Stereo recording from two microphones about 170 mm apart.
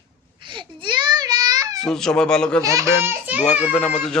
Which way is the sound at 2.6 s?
20° right (ahead or behind).